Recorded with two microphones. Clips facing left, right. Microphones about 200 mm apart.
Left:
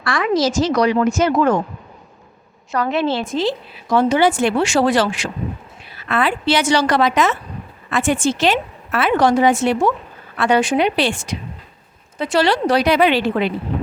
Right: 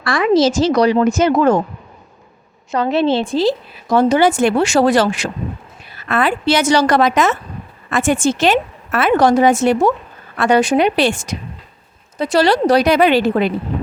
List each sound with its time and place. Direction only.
0.0 s a woman's voice: 25° right (ahead or behind)
2.7 s a woman's voice: 25° right (ahead or behind); by 13.5 s 45° right (ahead or behind)